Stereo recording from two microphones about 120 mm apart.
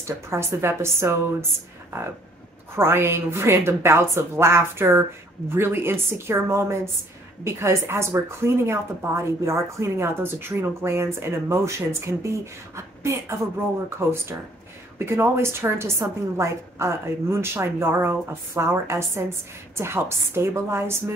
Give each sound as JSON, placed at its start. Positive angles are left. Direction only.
{"t": 0.0, "sound": "speech", "side_deg": -20}
{"t": 2.7, "sound": "speech", "side_deg": -20}